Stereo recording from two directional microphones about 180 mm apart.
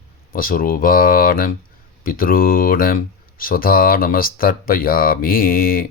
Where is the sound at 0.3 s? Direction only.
50° left (ahead or behind).